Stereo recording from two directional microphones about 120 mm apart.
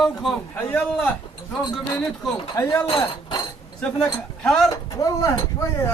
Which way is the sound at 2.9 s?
50° left (ahead or behind).